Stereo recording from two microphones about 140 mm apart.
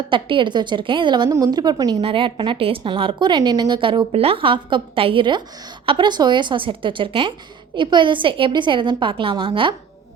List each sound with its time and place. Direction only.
0.1 s a woman's voice: 35° right (ahead or behind)